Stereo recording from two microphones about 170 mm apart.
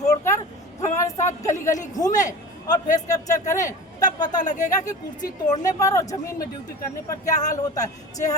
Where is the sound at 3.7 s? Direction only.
20° left (ahead or behind).